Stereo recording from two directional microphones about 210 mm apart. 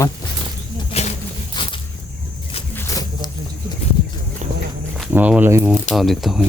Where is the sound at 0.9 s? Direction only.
30° left (ahead or behind).